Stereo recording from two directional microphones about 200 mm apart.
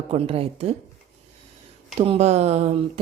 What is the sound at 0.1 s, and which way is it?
Speech, 30° right (ahead or behind).